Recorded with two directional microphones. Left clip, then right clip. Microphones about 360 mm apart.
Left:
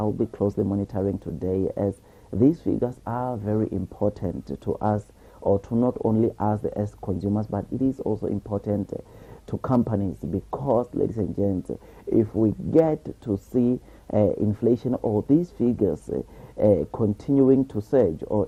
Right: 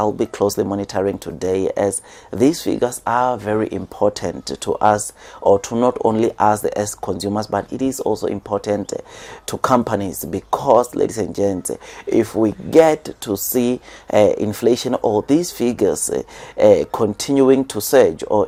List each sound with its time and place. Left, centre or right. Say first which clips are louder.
0.0 s speech: right 8 dB; centre
5.4 s speech: right 9 dB; centre
5.6 s speech: right 8 dB; centre
10.6 s speech: right 10 dB; right
10.9 s speech: right 7 dB; centre
15.0 s speech: right 10 dB; centre
15.3 s speech: right 5 dB; centre